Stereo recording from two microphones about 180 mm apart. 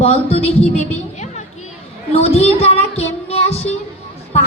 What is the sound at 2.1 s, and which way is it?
Child singing, 35° left (ahead or behind).